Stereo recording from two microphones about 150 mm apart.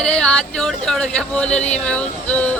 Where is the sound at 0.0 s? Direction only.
5° left (ahead or behind).